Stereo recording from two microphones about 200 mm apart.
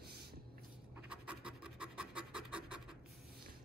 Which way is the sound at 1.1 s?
5° right (ahead or behind).